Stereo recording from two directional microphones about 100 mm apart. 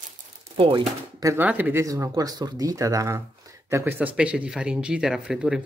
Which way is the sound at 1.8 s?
35° right (ahead or behind).